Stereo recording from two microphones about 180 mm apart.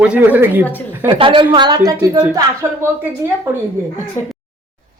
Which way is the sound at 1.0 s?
25° right (ahead or behind).